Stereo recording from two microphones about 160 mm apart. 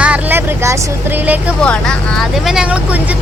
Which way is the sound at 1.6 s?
5° left (ahead or behind).